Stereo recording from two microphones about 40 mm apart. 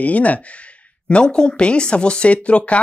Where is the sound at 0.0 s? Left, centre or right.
Left.